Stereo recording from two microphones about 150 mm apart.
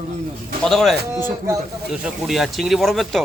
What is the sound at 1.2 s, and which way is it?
Speech, 20° right (ahead or behind).